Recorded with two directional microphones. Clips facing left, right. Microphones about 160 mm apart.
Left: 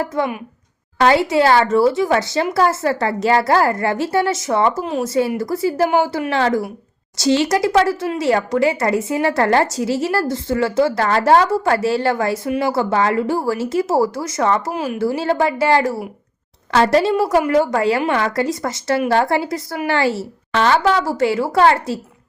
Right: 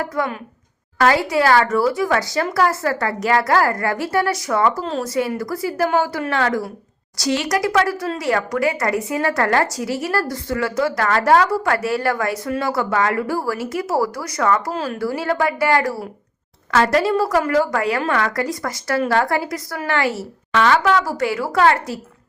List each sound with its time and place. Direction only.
0.0 s speech: 25° left (ahead or behind)
4.8 s speech: 15° left (ahead or behind)
5.0 s speech: 25° left (ahead or behind)